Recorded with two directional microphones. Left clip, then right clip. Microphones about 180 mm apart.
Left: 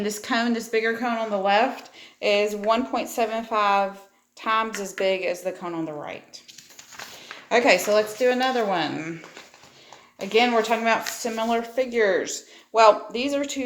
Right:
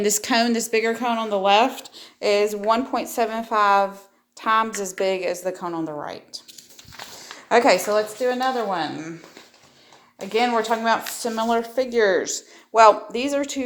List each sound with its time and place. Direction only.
0.0 s speech: 40° right (ahead or behind)
7.4 s speech: 25° right (ahead or behind)
7.8 s a woman's voice: centre (ahead or behind)
10.2 s speech: 10° right (ahead or behind)
12.2 s speech: 30° right (ahead or behind)